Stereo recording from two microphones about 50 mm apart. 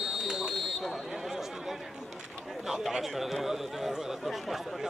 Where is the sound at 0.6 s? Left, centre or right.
Centre.